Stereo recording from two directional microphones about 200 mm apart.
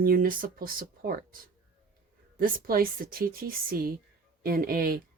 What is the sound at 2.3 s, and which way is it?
A woman's voice, 45° right (ahead or behind).